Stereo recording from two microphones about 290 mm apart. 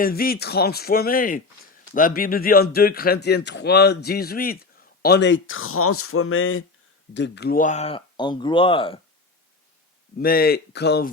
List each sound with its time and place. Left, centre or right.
0.0 s speech: left
10.2 s speech: left